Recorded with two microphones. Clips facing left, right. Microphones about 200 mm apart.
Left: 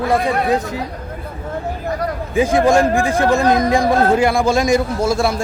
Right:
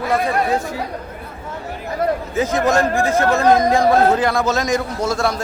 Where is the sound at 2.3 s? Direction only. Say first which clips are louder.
Left 6 dB; 10° left (ahead or behind).